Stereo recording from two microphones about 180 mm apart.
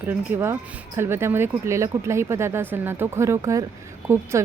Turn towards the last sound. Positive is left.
turn(degrees=-15)  # may be behind; listen again after turning